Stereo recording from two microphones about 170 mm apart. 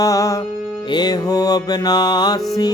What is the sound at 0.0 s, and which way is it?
Music, 20° left (ahead or behind).